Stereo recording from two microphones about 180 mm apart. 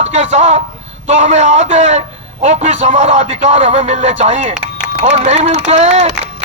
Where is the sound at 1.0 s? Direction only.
40° right (ahead or behind).